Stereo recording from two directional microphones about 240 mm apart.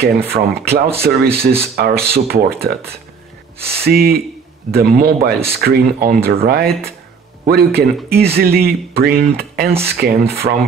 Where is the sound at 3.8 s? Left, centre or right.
Right.